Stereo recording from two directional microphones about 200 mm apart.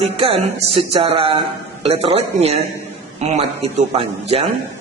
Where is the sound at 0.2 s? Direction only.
30° right (ahead or behind).